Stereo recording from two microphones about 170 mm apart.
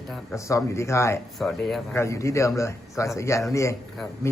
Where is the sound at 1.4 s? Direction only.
Centre (ahead or behind).